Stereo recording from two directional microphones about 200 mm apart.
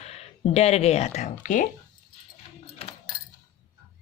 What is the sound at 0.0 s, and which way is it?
Speech, 30° left (ahead or behind).